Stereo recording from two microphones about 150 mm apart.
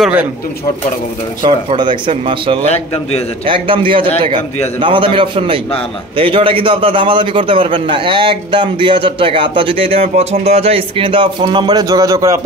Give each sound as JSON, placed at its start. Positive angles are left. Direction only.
{"t": 1.7, "sound": "a man's voice", "side_deg": -35}
{"t": 2.7, "sound": "a man's voice", "side_deg": 45}
{"t": 3.4, "sound": "a man's voice", "side_deg": -35}